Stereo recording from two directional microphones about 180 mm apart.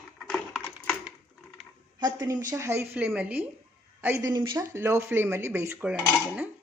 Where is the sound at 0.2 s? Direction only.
Centre (ahead or behind).